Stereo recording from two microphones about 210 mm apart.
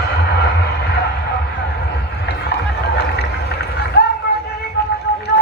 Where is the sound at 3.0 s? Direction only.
50° left (ahead or behind).